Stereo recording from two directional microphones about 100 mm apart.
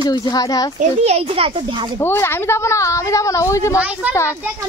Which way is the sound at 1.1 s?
80° right.